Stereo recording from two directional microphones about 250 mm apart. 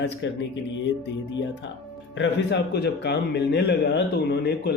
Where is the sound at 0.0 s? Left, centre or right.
Left.